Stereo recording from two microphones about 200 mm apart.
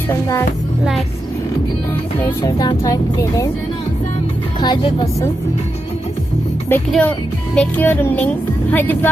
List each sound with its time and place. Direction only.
0.1 s speech: 15° left (ahead or behind)
2.1 s speech: 15° left (ahead or behind)
4.6 s speech: 20° left (ahead or behind)
6.7 s speech: 10° left (ahead or behind)